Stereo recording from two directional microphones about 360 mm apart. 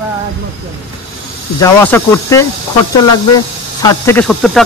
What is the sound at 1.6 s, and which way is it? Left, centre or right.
Speech, centre.